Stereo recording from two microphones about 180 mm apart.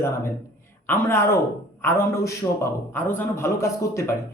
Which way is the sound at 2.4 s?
25° left (ahead or behind).